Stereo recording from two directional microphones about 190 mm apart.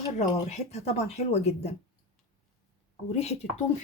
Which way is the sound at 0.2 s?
35° left (ahead or behind).